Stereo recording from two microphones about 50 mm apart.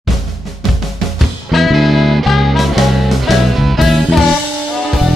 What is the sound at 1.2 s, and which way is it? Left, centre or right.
Music, centre.